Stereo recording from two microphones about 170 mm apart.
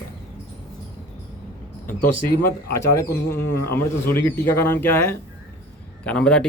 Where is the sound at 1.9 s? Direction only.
60° left (ahead or behind).